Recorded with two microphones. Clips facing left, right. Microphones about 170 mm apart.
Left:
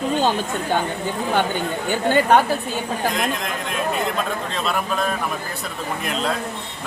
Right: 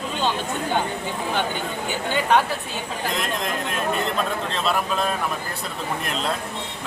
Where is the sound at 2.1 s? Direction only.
45° left (ahead or behind).